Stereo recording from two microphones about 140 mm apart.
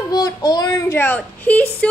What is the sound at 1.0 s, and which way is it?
Speech, 15° left (ahead or behind).